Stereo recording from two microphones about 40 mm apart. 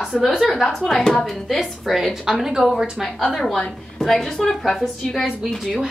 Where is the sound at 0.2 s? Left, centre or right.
Centre.